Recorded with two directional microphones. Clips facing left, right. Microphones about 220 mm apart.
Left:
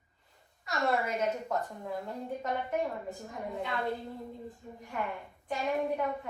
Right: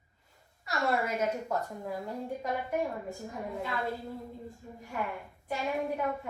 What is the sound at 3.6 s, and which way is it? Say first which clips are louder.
Speech: left 1 dB; centre (ahead or behind).